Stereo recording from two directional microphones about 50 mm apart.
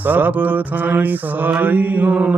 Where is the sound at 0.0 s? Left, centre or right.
Right.